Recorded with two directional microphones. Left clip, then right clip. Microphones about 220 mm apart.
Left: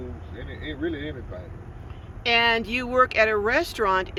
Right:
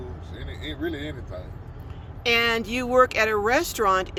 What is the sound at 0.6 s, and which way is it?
Speech, 15° right (ahead or behind).